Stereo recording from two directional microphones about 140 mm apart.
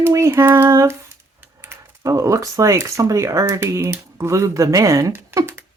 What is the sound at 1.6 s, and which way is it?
Speech, 20° right (ahead or behind).